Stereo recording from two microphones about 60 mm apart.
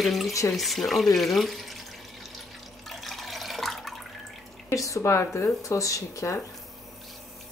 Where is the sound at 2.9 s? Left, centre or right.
Centre.